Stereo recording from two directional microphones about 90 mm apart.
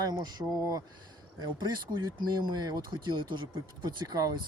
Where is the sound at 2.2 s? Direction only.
55° right (ahead or behind).